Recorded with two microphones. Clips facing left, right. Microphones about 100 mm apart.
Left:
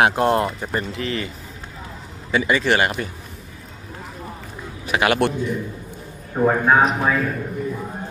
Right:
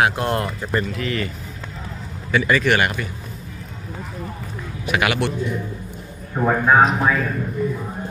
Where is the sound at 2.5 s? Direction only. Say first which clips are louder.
Even; 25° left (ahead or behind).